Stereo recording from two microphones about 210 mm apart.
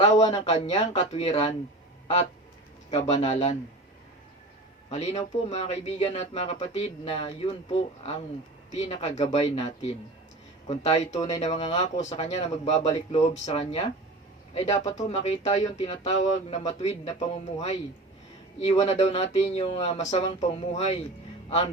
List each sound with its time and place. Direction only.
0.0 s speech: 30° left (ahead or behind)
0.3 s speech: 20° left (ahead or behind)
0.5 s speech: 30° left (ahead or behind)
2.9 s speech: 30° left (ahead or behind)
4.9 s speech: 30° left (ahead or behind)